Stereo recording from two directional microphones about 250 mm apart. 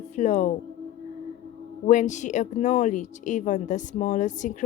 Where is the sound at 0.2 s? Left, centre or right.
Left.